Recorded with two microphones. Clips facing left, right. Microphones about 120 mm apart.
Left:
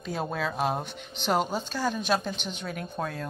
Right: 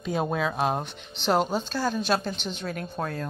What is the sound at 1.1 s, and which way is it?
A woman's voice, 10° left (ahead or behind).